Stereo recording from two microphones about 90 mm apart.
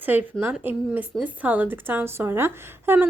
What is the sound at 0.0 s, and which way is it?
A woman's voice, 20° right (ahead or behind).